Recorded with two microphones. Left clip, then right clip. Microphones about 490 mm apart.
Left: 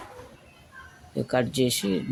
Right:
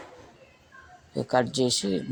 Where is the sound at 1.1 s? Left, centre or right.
Left.